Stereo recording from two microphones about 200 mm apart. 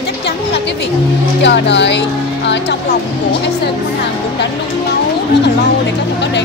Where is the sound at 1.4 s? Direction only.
60° left (ahead or behind).